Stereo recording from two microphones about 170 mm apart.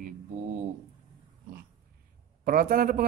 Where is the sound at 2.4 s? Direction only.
55° right (ahead or behind).